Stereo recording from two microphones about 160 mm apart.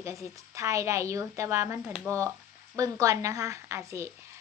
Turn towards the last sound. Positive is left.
turn(degrees=-20)  # may be behind; listen again after turning